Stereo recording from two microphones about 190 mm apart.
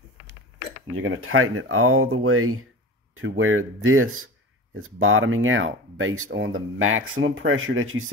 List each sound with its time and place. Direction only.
0.9 s speech: 90° right